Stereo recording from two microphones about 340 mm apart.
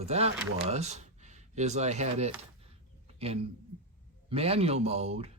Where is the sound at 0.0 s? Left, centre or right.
Centre.